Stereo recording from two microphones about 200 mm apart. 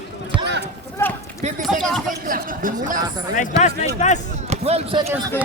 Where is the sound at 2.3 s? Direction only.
45° right (ahead or behind).